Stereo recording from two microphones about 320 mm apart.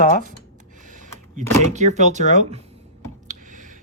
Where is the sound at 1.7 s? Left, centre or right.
Right.